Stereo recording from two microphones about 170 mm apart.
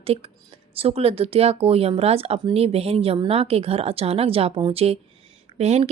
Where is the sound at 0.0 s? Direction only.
35° right (ahead or behind).